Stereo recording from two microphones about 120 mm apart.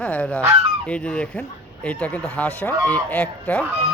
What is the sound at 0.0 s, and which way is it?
Speech, 10° left (ahead or behind).